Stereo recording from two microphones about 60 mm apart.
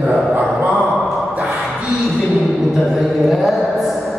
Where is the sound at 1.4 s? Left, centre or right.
Centre.